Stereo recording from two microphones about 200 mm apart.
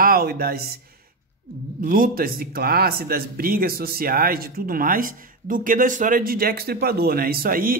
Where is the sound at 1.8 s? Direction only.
45° right (ahead or behind).